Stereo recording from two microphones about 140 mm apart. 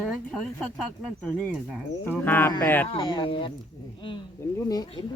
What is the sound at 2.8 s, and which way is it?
Speech, 40° left (ahead or behind).